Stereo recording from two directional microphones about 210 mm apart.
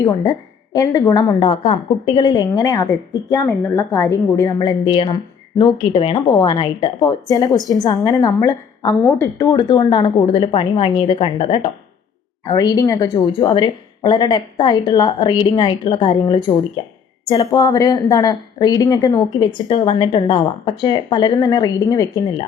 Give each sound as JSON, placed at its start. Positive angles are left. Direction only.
{"t": 0.0, "sound": "a woman's voice", "side_deg": 20}